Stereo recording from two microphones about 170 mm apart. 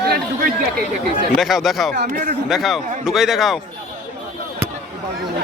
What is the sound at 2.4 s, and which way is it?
A man's voice, centre (ahead or behind).